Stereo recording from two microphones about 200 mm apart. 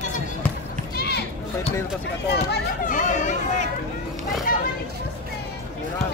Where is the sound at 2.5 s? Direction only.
40° left (ahead or behind).